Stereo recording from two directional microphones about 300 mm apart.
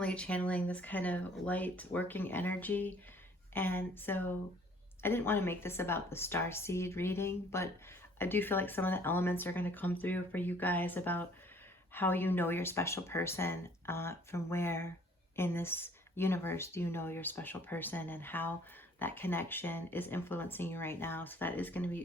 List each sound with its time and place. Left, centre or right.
0.0 s speech: centre